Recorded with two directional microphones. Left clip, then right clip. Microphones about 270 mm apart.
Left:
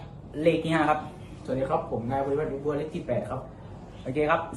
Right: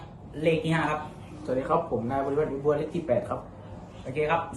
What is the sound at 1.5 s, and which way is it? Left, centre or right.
A man's voice, centre.